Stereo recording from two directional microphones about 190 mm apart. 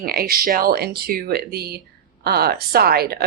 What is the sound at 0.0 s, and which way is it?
A woman's voice, 50° right (ahead or behind).